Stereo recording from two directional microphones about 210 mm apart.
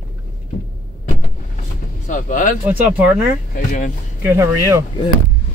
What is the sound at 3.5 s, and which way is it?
Speech, 40° left (ahead or behind).